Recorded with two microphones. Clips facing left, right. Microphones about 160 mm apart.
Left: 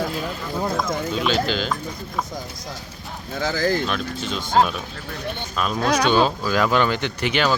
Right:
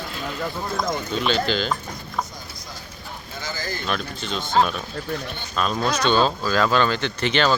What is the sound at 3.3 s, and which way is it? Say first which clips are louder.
Speech: left 10 dB; 90° left.